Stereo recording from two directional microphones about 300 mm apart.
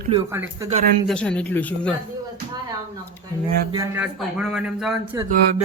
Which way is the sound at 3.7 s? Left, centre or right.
Centre.